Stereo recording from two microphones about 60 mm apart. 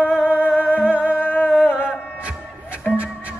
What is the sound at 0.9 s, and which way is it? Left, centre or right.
Music, right.